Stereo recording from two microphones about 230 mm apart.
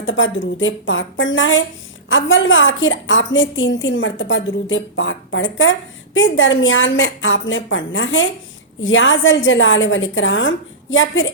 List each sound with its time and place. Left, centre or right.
0.0 s a woman's voice: left